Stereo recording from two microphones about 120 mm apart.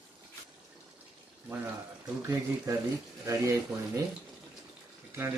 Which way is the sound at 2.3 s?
25° right (ahead or behind).